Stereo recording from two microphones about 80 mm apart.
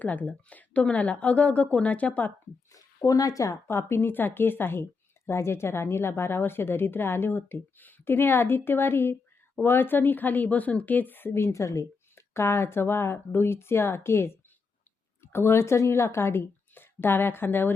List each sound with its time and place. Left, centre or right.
0.0 s speech: left
2.7 s a woman's voice: left